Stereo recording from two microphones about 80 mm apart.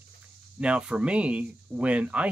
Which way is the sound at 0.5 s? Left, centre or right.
Centre.